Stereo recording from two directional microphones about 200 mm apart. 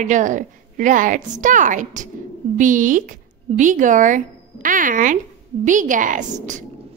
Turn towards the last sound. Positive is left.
turn(degrees=-40)  # may be behind; listen again after turning